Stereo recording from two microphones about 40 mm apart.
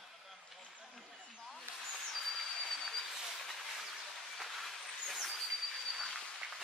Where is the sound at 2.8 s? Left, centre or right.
Centre.